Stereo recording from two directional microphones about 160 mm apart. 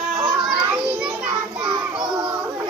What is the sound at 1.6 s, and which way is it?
Child singing, 25° right (ahead or behind).